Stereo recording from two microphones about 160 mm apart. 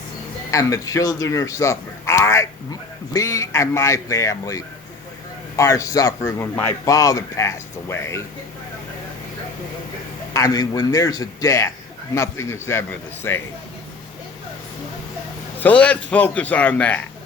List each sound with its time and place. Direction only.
0.5 s speech: 20° left (ahead or behind)
10.3 s a man's voice: 20° left (ahead or behind)
15.6 s a man's voice: 10° left (ahead or behind)